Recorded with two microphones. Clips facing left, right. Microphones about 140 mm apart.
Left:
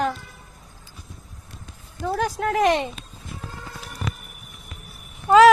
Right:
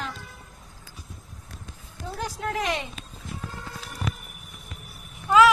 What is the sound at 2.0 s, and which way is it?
Speech, 70° left (ahead or behind).